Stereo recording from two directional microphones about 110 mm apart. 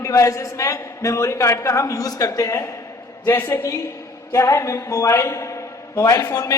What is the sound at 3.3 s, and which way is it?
A woman's voice, 20° left (ahead or behind).